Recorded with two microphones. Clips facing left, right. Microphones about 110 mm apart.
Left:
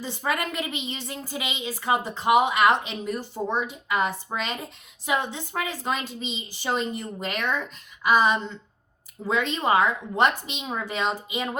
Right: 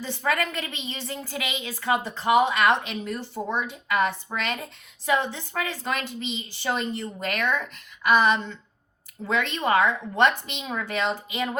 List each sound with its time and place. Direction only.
0.0 s speech: 15° left (ahead or behind)
9.6 s speech: 15° left (ahead or behind)